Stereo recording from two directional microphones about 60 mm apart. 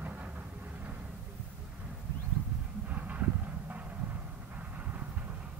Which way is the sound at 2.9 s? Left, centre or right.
Right.